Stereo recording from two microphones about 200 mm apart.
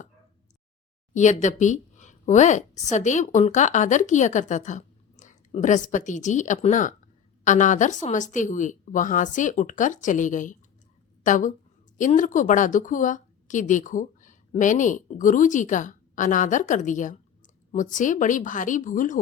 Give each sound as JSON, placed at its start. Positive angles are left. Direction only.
{"t": 1.1, "sound": "a woman's voice", "side_deg": 35}